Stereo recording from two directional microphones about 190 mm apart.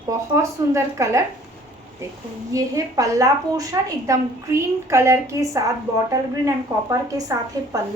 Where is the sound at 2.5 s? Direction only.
15° right (ahead or behind).